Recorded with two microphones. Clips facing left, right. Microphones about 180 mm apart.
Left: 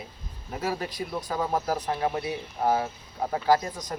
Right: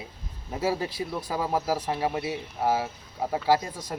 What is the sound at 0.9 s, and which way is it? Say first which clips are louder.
Speech: even; 5° right (ahead or behind).